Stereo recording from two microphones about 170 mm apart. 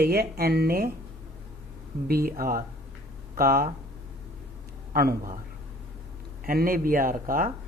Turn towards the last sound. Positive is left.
turn(degrees=-55)  # may be behind; listen again after turning